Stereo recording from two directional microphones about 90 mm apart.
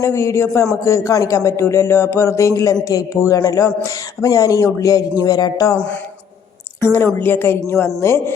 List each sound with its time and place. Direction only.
0.0 s a man's voice: 35° left (ahead or behind)
6.8 s a woman's voice: 25° left (ahead or behind)